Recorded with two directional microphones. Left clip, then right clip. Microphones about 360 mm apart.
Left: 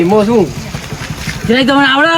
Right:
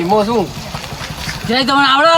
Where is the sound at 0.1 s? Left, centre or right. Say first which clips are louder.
Even; centre.